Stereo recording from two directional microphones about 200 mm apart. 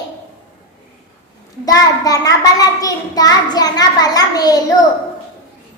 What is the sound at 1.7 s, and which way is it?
A child's voice, 15° left (ahead or behind).